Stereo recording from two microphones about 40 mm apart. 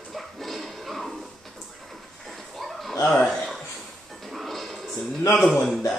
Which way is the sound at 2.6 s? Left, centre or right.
Centre.